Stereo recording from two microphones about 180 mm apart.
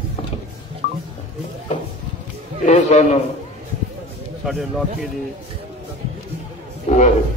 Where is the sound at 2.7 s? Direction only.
40° left (ahead or behind).